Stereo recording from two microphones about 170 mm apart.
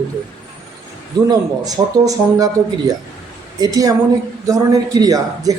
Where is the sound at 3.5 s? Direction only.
20° right (ahead or behind).